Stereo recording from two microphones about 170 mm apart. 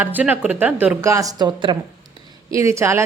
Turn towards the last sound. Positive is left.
turn(degrees=-15)  # may be behind; listen again after turning